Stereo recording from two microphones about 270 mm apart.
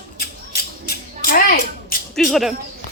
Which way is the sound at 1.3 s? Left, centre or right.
Left.